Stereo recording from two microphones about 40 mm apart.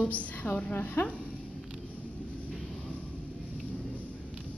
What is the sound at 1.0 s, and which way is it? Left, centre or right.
Speech, left.